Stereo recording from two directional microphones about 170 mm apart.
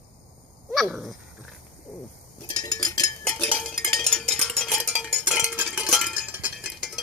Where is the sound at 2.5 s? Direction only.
20° left (ahead or behind).